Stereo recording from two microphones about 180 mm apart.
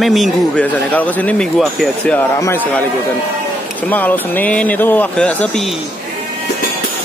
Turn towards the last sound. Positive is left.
turn(degrees=0)  # may be behind; listen again after turning